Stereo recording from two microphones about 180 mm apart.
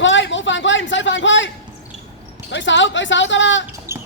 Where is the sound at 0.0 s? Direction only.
90° left.